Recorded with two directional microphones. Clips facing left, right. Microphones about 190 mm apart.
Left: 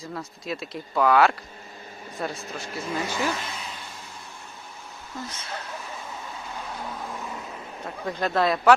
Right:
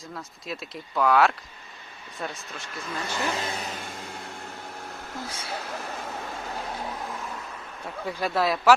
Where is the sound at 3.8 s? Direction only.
55° right (ahead or behind).